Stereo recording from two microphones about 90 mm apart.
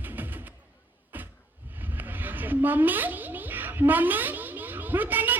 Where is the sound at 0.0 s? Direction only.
20° right (ahead or behind).